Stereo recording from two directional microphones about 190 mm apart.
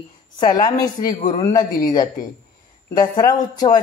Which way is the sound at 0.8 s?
20° left (ahead or behind).